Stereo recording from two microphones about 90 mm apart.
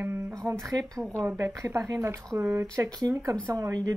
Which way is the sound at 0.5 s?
40° right (ahead or behind).